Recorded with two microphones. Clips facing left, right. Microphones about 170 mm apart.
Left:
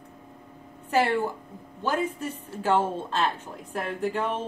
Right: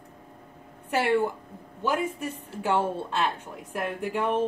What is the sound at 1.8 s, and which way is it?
A woman's voice, 10° right (ahead or behind).